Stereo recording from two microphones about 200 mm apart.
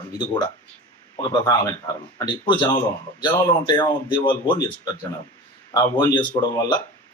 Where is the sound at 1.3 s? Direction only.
20° left (ahead or behind).